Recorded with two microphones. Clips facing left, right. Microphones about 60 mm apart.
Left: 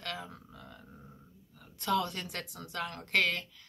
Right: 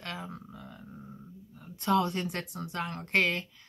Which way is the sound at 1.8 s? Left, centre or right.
Right.